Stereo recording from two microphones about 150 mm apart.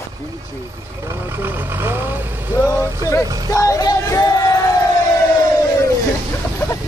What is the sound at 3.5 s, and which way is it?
Music, 20° left (ahead or behind).